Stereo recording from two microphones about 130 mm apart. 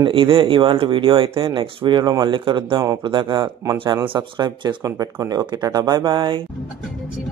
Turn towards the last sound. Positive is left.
turn(degrees=-35)  # may be behind; listen again after turning